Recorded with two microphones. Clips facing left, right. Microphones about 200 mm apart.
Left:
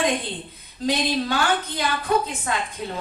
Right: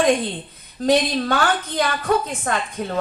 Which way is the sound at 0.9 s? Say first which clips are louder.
Right 5 dB; 50° right (ahead or behind).